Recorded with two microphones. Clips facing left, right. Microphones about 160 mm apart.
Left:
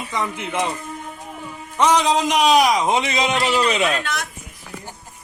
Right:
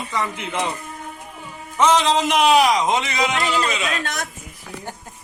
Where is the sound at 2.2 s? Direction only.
Centre (ahead or behind).